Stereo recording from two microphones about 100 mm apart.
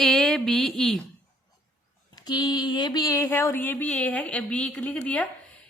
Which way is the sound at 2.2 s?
45° left (ahead or behind).